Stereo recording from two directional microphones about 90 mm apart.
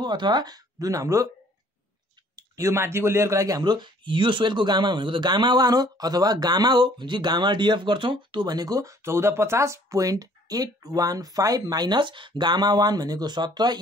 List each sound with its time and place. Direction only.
0.0 s a man's voice: 55° right (ahead or behind); by 1.3 s 35° right (ahead or behind)
2.3 s clicking: 35° right (ahead or behind)
2.8 s a man's voice: 30° right (ahead or behind); by 13.7 s 55° right (ahead or behind)